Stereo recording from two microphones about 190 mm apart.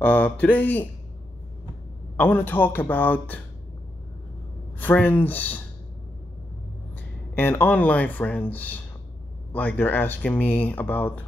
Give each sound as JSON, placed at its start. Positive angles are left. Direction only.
{"t": 0.0, "sound": "speech", "side_deg": 10}
{"t": 2.1, "sound": "speech", "side_deg": 10}
{"t": 4.7, "sound": "speech", "side_deg": 10}
{"t": 7.3, "sound": "speech", "side_deg": 10}